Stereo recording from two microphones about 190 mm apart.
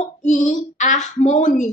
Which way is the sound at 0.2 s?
40° left (ahead or behind).